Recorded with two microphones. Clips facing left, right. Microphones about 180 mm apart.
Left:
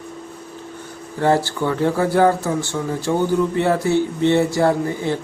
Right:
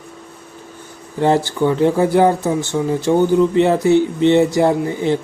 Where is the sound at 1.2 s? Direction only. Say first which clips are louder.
Right 3 dB; 20° right (ahead or behind).